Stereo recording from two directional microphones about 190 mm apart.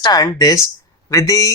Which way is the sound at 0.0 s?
20° left (ahead or behind).